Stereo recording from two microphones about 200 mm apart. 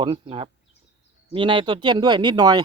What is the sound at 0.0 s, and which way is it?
Speech, 25° right (ahead or behind).